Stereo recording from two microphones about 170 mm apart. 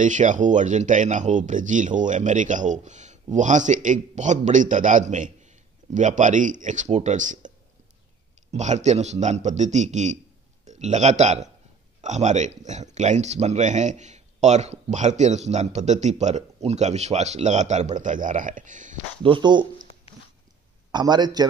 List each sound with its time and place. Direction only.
0.0 s a man's voice: 50° right (ahead or behind)
19.2 s speech: 30° right (ahead or behind)
20.9 s a man's voice: 25° right (ahead or behind)